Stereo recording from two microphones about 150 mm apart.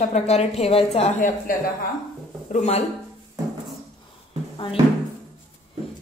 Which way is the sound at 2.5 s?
50° left (ahead or behind).